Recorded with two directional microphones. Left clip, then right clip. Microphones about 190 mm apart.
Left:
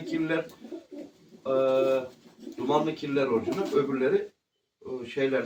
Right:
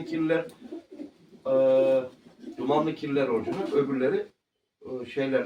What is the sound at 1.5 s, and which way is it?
Speech, 15° right (ahead or behind).